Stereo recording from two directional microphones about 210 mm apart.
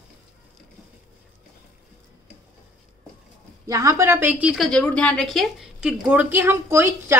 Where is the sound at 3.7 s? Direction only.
15° right (ahead or behind).